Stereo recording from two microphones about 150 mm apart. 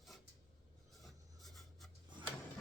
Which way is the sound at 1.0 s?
Centre (ahead or behind).